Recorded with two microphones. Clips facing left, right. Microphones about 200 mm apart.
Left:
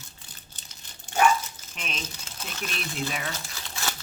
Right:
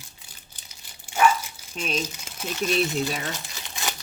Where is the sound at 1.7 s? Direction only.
40° right (ahead or behind).